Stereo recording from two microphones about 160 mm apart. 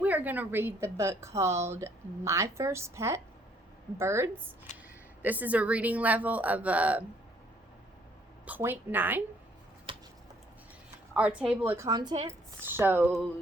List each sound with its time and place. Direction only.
0.0 s a woman's voice: 10° right (ahead or behind)
8.4 s a woman's voice: 10° right (ahead or behind)
9.9 s a sound: 30° right (ahead or behind)
11.1 s a woman's voice: 10° right (ahead or behind)
11.9 s speech: 25° right (ahead or behind)
12.6 s a woman's voice: 15° right (ahead or behind)